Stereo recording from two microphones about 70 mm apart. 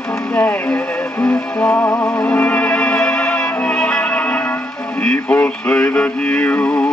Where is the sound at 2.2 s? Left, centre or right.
Left.